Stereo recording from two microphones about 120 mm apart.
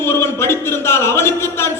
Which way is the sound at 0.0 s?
20° left (ahead or behind).